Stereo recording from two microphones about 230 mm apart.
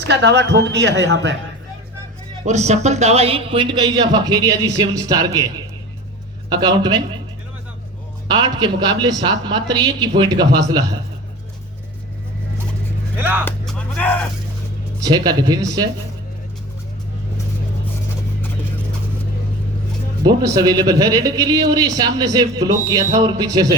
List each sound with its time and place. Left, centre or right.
0.0 s a woman's voice: right
2.4 s speech: right
6.5 s a man's voice: centre
8.3 s a man's voice: centre
13.1 s speech: centre
13.4 s vehicle: centre
15.0 s a man's voice: centre
20.2 s a man's voice: centre